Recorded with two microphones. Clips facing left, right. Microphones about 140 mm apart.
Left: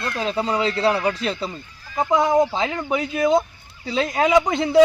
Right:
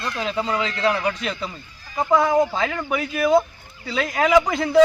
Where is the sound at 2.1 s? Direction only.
20° left (ahead or behind).